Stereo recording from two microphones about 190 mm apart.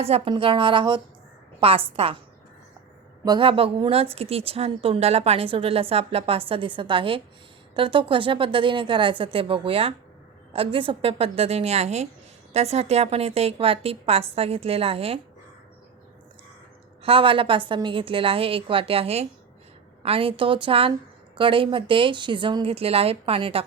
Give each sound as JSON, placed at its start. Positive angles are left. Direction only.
{"t": 0.0, "sound": "a woman's voice", "side_deg": -30}
{"t": 3.2, "sound": "a woman's voice", "side_deg": -25}
{"t": 17.0, "sound": "a woman's voice", "side_deg": -30}